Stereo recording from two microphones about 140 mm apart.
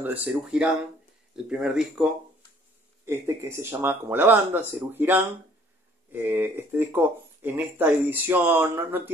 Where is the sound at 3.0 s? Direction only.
20° right (ahead or behind).